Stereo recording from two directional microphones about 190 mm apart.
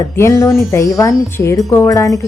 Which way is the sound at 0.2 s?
15° left (ahead or behind).